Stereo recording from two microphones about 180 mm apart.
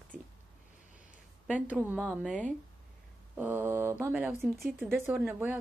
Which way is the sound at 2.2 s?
5° left (ahead or behind).